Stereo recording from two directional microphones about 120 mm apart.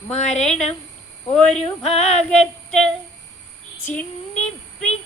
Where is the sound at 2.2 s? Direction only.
5° left (ahead or behind).